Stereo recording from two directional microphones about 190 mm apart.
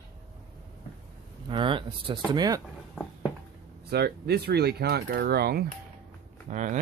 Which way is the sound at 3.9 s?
60° right (ahead or behind).